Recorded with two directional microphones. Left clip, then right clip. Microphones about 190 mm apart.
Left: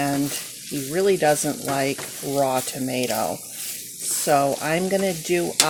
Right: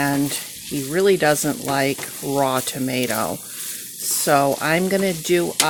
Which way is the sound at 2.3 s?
30° right (ahead or behind).